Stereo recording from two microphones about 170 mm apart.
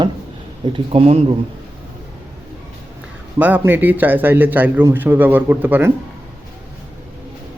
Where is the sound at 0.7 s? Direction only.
35° right (ahead or behind).